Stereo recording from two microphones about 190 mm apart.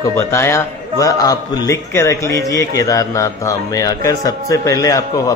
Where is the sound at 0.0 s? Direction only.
15° left (ahead or behind).